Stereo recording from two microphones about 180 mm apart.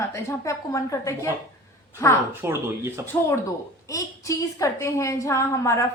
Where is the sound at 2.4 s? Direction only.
15° right (ahead or behind).